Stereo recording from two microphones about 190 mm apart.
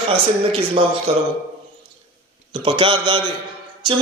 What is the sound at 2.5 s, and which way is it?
Speech, 30° right (ahead or behind).